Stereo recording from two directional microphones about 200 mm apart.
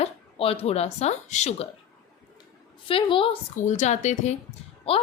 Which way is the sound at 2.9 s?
25° left (ahead or behind).